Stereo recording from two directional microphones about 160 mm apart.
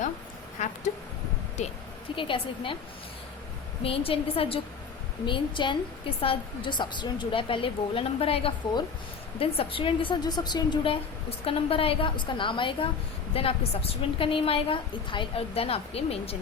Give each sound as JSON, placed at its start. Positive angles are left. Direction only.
{"t": 1.6, "sound": "a sound", "side_deg": 45}
{"t": 2.1, "sound": "a woman's voice", "side_deg": 30}
{"t": 3.8, "sound": "a woman's voice", "side_deg": 35}